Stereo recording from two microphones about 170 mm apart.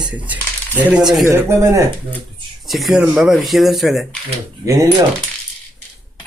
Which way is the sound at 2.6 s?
Centre (ahead or behind).